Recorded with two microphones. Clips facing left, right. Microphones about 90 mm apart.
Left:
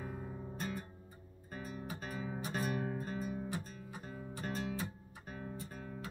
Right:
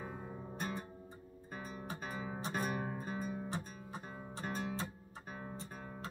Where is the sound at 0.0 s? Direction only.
20° right (ahead or behind).